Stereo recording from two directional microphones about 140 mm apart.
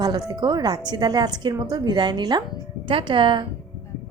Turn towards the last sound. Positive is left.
turn(degrees=-35)  # may be behind; listen again after turning